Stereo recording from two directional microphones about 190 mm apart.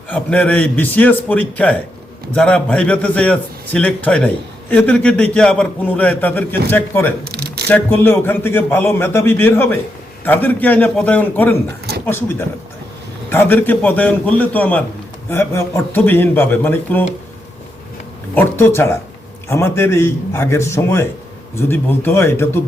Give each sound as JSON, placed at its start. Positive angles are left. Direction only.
{"t": 0.1, "sound": "a man's voice", "side_deg": 5}
{"t": 7.3, "sound": "a sound", "side_deg": -55}
{"t": 7.7, "sound": "a man's voice", "side_deg": 10}
{"t": 18.3, "sound": "a man's voice", "side_deg": 10}